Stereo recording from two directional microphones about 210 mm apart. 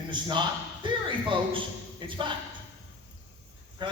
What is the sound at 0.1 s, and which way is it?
Speech, 20° right (ahead or behind).